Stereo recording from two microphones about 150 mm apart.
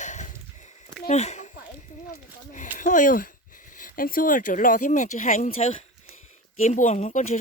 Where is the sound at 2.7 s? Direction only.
60° left (ahead or behind).